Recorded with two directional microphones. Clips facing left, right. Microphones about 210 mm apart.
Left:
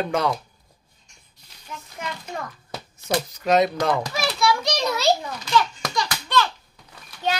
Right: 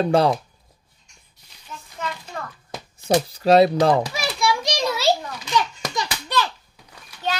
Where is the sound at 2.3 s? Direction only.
15° left (ahead or behind).